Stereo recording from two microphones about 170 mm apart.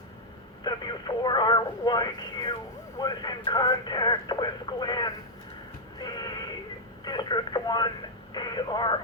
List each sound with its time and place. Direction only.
0.6 s speech: 25° left (ahead or behind)
6.0 s music: 25° left (ahead or behind)
7.0 s speech: 25° left (ahead or behind)